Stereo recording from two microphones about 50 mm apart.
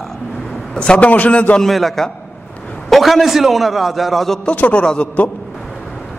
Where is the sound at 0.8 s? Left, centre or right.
Left.